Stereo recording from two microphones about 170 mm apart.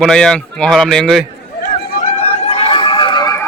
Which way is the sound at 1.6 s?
50° left (ahead or behind).